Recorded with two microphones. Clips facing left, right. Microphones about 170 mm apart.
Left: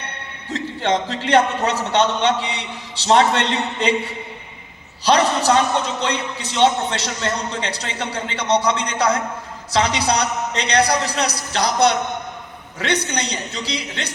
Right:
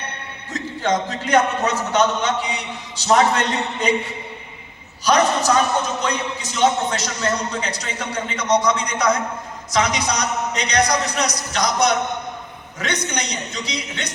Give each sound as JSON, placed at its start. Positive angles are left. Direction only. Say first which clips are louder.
{"t": 0.5, "sound": "a man's voice", "louder": "left 1 dB", "side_deg": 30}
{"t": 5.0, "sound": "a man's voice", "louder": "left 1 dB", "side_deg": 30}